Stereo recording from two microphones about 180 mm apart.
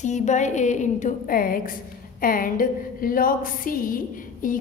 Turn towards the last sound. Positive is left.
turn(degrees=50)  # may be behind; listen again after turning